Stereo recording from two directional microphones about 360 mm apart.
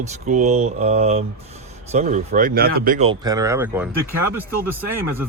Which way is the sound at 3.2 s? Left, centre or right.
Centre.